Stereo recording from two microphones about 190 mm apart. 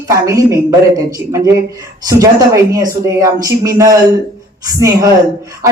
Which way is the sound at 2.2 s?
15° right (ahead or behind).